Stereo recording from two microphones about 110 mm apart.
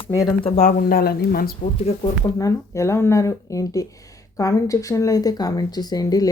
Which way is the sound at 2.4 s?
25° left (ahead or behind).